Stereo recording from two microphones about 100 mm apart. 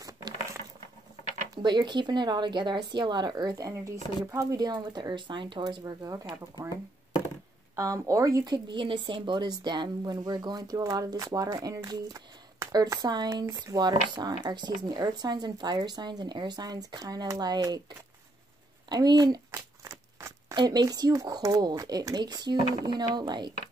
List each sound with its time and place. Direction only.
0.0 s a sound: 35° right (ahead or behind)
1.6 s speech: 50° right (ahead or behind)
7.7 s speech: 30° right (ahead or behind)
8.6 s speech: 55° right (ahead or behind); by 17.7 s 40° right (ahead or behind)
18.9 s speech: 45° right (ahead or behind)
19.5 s a sound: 30° right (ahead or behind)
20.5 s speech: 40° right (ahead or behind)